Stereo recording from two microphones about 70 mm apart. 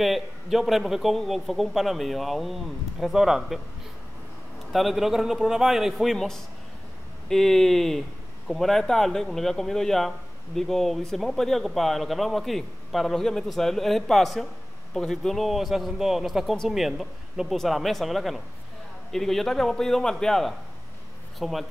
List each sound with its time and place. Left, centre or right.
0.0 s a man's voice: centre
4.7 s a man's voice: centre
6.1 s a man's voice: centre